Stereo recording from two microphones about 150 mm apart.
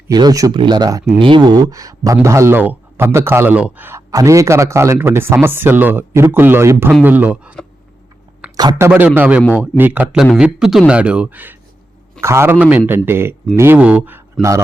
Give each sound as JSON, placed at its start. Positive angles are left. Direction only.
{"t": 0.1, "sound": "speech", "side_deg": -25}
{"t": 8.5, "sound": "speech", "side_deg": -25}
{"t": 8.9, "sound": "speech", "side_deg": -10}
{"t": 14.4, "sound": "a man's voice", "side_deg": 0}